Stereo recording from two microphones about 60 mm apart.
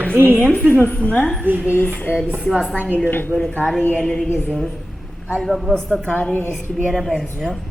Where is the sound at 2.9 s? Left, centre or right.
Left.